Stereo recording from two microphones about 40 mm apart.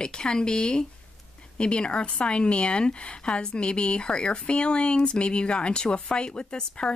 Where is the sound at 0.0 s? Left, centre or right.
Centre.